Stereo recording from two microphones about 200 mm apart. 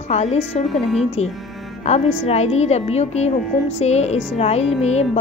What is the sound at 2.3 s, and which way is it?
A woman's voice, 30° left (ahead or behind).